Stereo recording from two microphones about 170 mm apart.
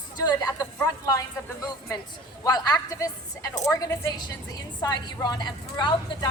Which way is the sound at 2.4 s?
20° left (ahead or behind).